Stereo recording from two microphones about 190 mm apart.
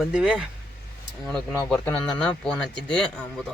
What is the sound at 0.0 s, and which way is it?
Speech, 5° right (ahead or behind).